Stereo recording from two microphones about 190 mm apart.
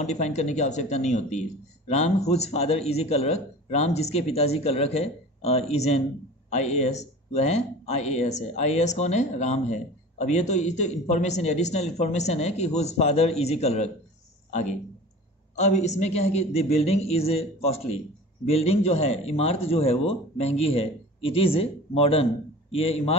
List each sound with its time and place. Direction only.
0.0 s speech: 35° left (ahead or behind)